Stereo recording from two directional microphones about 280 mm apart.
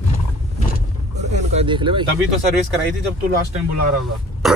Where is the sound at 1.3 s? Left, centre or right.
Right.